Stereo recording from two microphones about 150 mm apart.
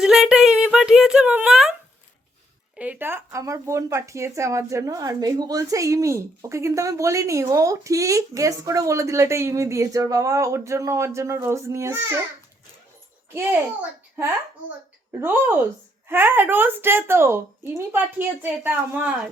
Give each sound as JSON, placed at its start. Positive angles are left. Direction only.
{"t": 0.0, "sound": "speech", "side_deg": -5}
{"t": 2.7, "sound": "speech", "side_deg": -10}
{"t": 13.3, "sound": "a woman's voice", "side_deg": -15}
{"t": 15.2, "sound": "a woman's voice", "side_deg": -15}